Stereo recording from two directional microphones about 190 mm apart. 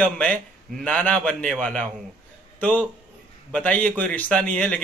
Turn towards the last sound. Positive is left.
turn(degrees=5)  # may be behind; listen again after turning